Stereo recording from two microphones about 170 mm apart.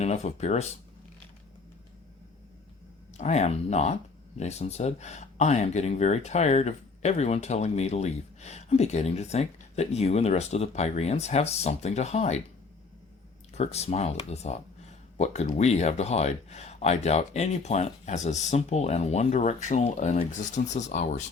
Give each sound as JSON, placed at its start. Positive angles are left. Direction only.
{"t": 0.0, "sound": "speech", "side_deg": 40}
{"t": 3.2, "sound": "speech", "side_deg": 40}
{"t": 13.5, "sound": "speech", "side_deg": 40}